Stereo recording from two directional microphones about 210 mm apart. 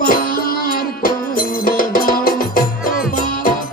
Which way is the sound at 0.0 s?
45° left (ahead or behind).